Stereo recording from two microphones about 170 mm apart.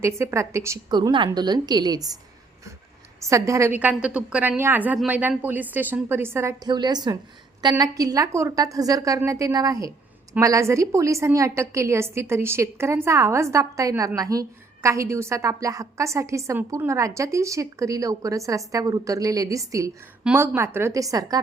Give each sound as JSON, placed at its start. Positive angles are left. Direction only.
{"t": 0.0, "sound": "a woman's voice", "side_deg": -15}
{"t": 0.9, "sound": "a woman's voice", "side_deg": -25}
{"t": 3.2, "sound": "a woman's voice", "side_deg": -20}